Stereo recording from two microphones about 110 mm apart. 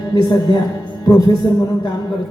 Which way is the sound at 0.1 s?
40° left (ahead or behind).